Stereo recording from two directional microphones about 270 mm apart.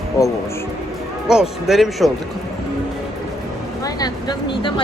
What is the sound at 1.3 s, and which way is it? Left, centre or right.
Speech, centre.